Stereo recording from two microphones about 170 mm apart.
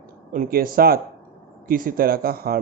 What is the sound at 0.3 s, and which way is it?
A man's voice, 55° right (ahead or behind).